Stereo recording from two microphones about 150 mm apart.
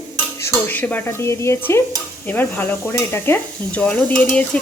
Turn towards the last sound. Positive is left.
turn(degrees=10)  # may be behind; listen again after turning